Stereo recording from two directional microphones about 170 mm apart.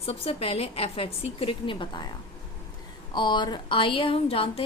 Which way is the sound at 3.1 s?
25° left (ahead or behind).